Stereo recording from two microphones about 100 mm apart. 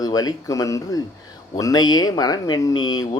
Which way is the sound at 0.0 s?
40° left (ahead or behind).